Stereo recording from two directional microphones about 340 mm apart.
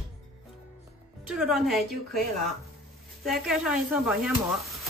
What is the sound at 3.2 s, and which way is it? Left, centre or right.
A woman's voice, centre.